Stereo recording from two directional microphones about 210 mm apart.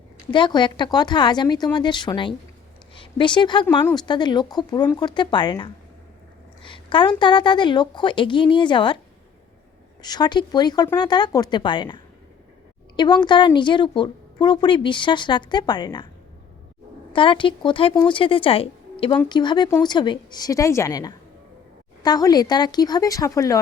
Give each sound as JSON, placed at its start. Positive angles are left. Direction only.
{"t": 0.3, "sound": "a woman's voice", "side_deg": 20}
{"t": 10.0, "sound": "a woman's voice", "side_deg": 20}
{"t": 13.0, "sound": "a woman's voice", "side_deg": 20}
{"t": 17.1, "sound": "a woman's voice", "side_deg": 25}